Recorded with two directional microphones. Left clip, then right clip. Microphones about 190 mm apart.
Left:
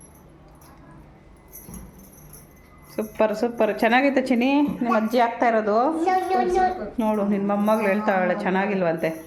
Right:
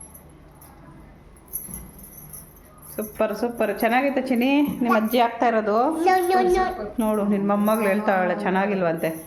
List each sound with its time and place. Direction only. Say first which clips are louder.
2.9 s a woman's voice: left 2 dB; 10° left (ahead or behind)
4.4 s speech: even; centre (ahead or behind)
6.1 s a woman's voice: right 3 dB; 55° right (ahead or behind)
6.9 s speech: even; centre (ahead or behind)